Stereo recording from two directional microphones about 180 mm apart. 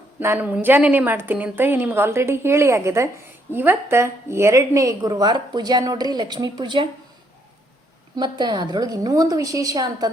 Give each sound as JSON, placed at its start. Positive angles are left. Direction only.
{"t": 0.2, "sound": "a woman's voice", "side_deg": -10}
{"t": 8.1, "sound": "a woman's voice", "side_deg": -25}